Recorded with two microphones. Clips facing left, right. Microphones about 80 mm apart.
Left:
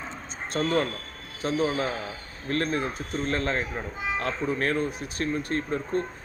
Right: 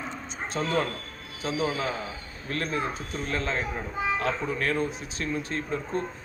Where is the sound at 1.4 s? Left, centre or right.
Left.